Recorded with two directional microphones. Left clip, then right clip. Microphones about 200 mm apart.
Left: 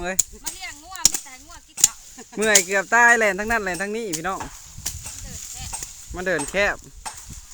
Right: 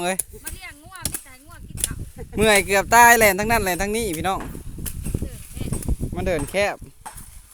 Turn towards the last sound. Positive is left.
turn(degrees=-10)  # may be behind; listen again after turning